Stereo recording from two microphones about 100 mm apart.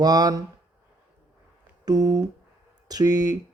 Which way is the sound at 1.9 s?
40° right (ahead or behind).